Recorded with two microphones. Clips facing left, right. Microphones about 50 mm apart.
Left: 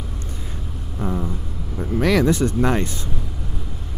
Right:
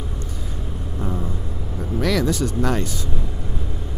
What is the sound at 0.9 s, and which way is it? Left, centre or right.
Vehicle, centre.